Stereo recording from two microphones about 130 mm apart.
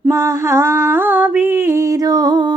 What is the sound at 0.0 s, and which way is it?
Mantra, 20° right (ahead or behind).